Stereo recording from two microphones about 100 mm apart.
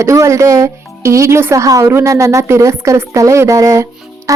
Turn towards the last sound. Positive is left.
turn(degrees=-35)  # may be behind; listen again after turning